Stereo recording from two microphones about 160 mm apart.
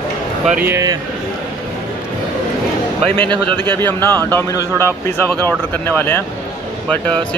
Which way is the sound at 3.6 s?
15° left (ahead or behind).